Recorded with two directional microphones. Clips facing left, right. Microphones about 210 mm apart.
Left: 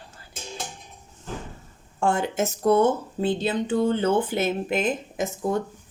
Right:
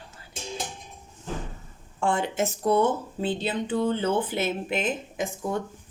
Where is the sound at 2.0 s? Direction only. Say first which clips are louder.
Left 2 dB; 45° left (ahead or behind).